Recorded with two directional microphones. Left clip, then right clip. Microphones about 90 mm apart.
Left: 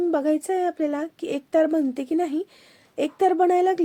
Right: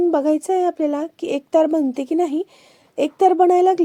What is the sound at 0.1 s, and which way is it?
A woman's voice, 40° right (ahead or behind).